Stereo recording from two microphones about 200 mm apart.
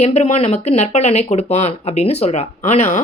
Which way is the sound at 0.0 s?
35° left (ahead or behind).